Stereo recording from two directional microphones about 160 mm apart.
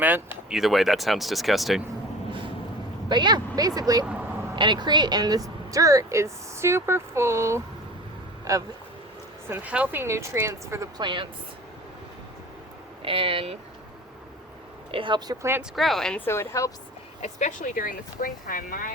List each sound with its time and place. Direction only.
0.0 s speech: 10° right (ahead or behind)
3.1 s speech: 30° right (ahead or behind)
9.5 s a woman's voice: 10° right (ahead or behind); by 11.3 s 30° right (ahead or behind)
13.0 s speech: 35° right (ahead or behind)
14.9 s speech: 30° right (ahead or behind)
15.7 s speech: centre (ahead or behind)
16.2 s speech: 15° left (ahead or behind)
17.2 s speech: 45° left (ahead or behind)